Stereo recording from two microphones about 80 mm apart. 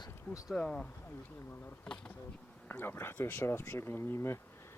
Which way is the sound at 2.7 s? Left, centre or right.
Left.